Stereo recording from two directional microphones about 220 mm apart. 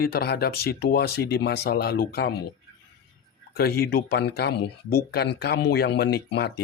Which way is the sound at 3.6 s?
45° left (ahead or behind).